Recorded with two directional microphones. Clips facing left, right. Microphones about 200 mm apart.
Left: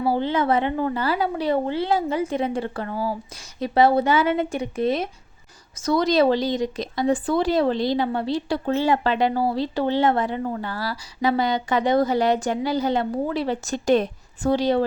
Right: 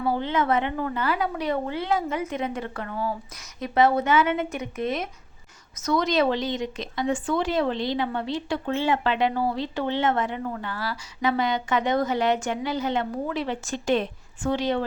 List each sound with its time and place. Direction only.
0.0 s speech: 30° left (ahead or behind)